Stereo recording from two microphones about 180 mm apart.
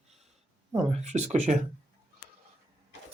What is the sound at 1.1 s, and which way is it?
Speech, 40° right (ahead or behind).